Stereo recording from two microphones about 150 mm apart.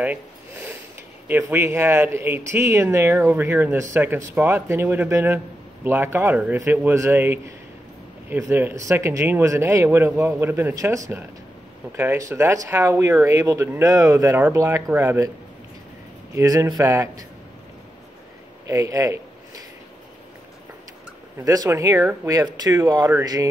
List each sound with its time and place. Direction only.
0.0 s a sound: 10° right (ahead or behind)
1.2 s speech: 15° right (ahead or behind)
16.3 s speech: 20° right (ahead or behind)
18.7 s speech: 20° right (ahead or behind)
21.5 s speech: 20° right (ahead or behind)